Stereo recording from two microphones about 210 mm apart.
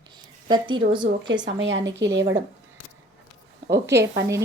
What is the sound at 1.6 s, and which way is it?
Speech, 60° right (ahead or behind).